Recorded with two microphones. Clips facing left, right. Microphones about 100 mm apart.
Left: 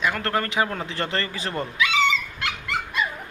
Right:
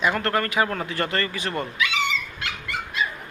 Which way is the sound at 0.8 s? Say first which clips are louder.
Right 2 dB; 25° left (ahead or behind).